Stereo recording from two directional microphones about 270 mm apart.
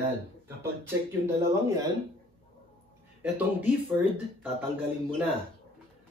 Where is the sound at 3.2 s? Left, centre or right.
Centre.